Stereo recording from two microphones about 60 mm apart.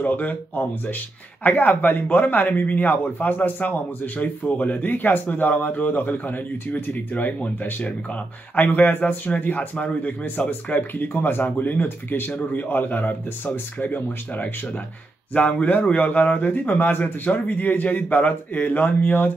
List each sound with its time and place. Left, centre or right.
0.0 s a man's voice: left